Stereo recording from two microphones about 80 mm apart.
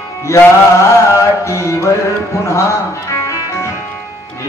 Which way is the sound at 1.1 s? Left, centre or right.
Left.